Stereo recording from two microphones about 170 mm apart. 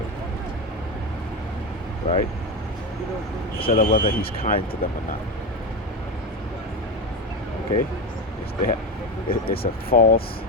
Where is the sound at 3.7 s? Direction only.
55° left (ahead or behind).